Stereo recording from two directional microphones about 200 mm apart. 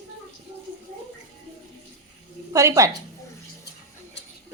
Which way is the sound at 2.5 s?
15° right (ahead or behind).